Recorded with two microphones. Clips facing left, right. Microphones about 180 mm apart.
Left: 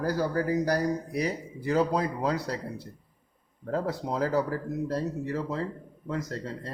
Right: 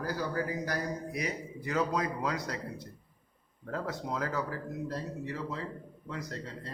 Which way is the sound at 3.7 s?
35° left (ahead or behind).